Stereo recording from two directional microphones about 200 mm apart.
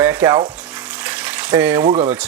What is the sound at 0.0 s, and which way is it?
Frying, 10° right (ahead or behind).